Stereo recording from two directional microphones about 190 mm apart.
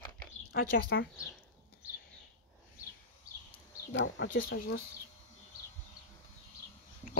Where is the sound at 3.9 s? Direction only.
75° left (ahead or behind).